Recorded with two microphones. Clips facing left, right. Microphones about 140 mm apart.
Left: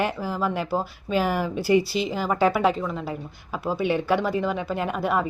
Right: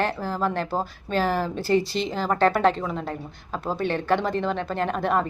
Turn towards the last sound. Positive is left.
turn(degrees=5)  # may be behind; listen again after turning